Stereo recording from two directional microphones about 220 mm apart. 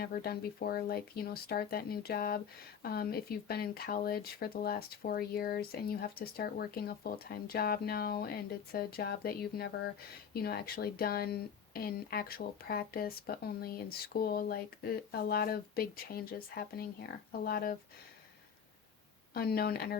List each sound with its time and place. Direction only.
0.0 s speech: 45° left (ahead or behind)
19.3 s speech: 45° left (ahead or behind)